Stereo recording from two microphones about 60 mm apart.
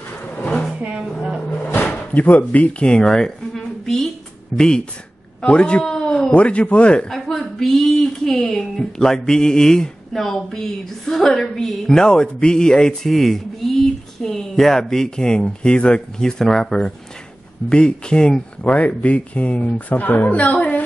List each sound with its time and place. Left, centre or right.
0.7 s speech: centre
1.0 s speech: centre
2.1 s speech: left
7.1 s speech: centre; by 20.8 s left